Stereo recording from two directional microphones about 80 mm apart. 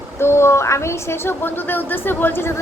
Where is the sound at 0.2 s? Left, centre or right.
Left.